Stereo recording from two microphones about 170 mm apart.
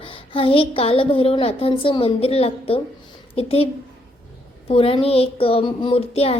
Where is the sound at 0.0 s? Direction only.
30° left (ahead or behind).